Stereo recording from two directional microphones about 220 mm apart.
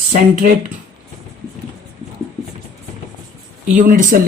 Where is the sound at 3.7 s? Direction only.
35° right (ahead or behind).